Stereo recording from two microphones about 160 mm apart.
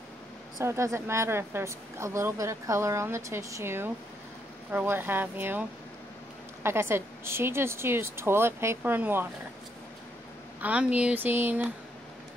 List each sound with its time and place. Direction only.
0.6 s a woman's voice: 20° right (ahead or behind)
10.6 s a woman's voice: 10° right (ahead or behind)